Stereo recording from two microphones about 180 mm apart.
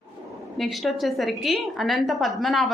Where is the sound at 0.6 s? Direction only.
Centre (ahead or behind).